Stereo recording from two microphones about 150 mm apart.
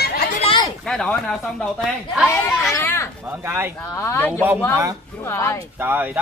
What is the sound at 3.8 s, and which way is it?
Speech, 15° left (ahead or behind).